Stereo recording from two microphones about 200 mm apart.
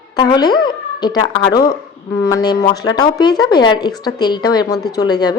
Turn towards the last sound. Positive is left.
turn(degrees=20)  # may be behind; listen again after turning